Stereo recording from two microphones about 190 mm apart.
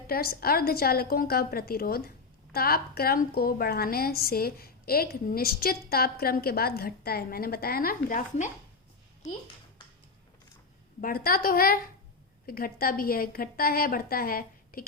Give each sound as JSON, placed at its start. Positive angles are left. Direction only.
{"t": 0.1, "sound": "a woman's voice", "side_deg": 55}
{"t": 11.0, "sound": "a woman's voice", "side_deg": 50}